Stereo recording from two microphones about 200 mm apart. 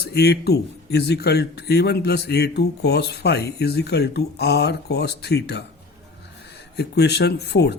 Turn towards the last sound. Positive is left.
turn(degrees=55)  # may be behind; listen again after turning